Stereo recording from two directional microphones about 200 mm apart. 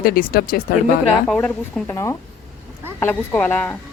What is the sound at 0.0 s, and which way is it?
Speech, 45° left (ahead or behind).